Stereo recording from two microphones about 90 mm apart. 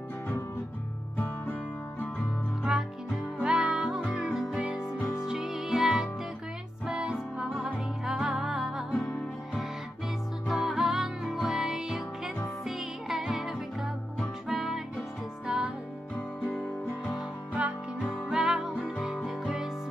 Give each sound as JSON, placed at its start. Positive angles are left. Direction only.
{"t": 1.1, "sound": "music", "side_deg": 20}
{"t": 3.3, "sound": "music", "side_deg": -10}
{"t": 4.1, "sound": "music", "side_deg": -15}
{"t": 10.4, "sound": "music", "side_deg": 0}
{"t": 18.3, "sound": "music", "side_deg": -5}